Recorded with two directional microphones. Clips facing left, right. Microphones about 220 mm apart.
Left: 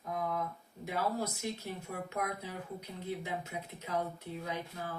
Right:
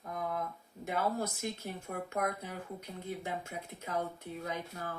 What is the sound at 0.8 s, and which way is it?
Speech, 50° right (ahead or behind).